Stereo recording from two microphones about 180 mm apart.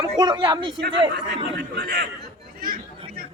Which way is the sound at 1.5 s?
65° right (ahead or behind).